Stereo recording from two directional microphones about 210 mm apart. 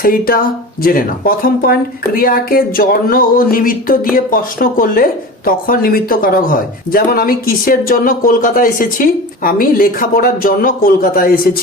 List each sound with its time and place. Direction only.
0.0 s speech: 45° left (ahead or behind)